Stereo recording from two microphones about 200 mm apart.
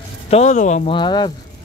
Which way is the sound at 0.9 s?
20° left (ahead or behind).